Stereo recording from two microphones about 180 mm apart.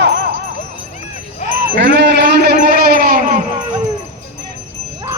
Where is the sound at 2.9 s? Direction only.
55° right (ahead or behind).